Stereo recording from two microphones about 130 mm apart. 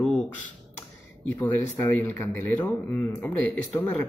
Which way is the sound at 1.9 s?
15° left (ahead or behind).